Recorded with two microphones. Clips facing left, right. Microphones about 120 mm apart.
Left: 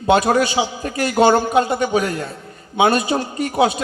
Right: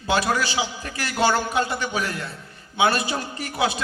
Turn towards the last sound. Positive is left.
turn(degrees=35)  # may be behind; listen again after turning